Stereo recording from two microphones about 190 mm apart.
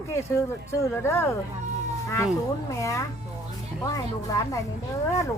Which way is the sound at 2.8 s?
15° left (ahead or behind).